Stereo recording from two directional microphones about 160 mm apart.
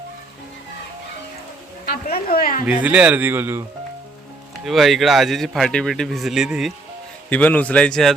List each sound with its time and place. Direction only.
1.9 s a woman's voice: 75° left (ahead or behind)
2.6 s a man's voice: 10° right (ahead or behind)
4.6 s speech: centre (ahead or behind)
7.3 s a man's voice: 10° left (ahead or behind)